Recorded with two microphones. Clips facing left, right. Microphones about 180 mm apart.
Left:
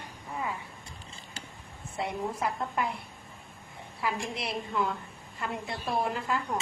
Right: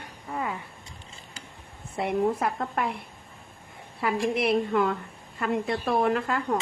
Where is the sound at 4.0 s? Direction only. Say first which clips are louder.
Right 8 dB; 60° right (ahead or behind).